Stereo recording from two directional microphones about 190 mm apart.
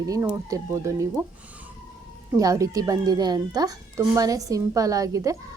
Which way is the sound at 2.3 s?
15° right (ahead or behind).